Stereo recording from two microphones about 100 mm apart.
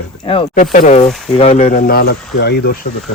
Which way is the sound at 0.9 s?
90° left.